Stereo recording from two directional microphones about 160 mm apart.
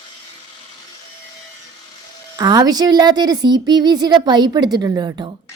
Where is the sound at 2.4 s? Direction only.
25° right (ahead or behind).